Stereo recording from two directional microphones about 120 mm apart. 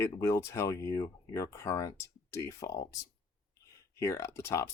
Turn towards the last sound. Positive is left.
turn(degrees=25)  # may be behind; listen again after turning